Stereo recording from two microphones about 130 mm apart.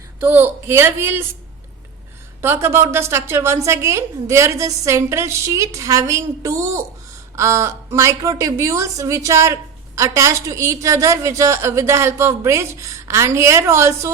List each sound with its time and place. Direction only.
0.2 s speech: 15° right (ahead or behind)
2.4 s a woman's voice: 20° right (ahead or behind)